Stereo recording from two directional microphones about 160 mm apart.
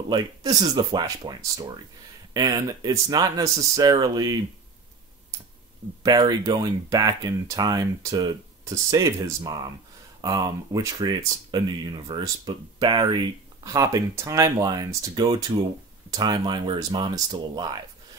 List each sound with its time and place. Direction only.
0.1 s speech: 25° right (ahead or behind)
6.0 s speech: 25° right (ahead or behind)